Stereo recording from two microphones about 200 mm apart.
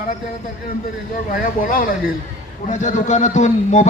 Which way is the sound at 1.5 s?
45° left (ahead or behind).